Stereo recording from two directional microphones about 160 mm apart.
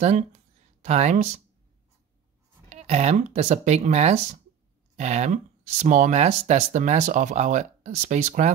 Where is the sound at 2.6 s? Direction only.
40° right (ahead or behind).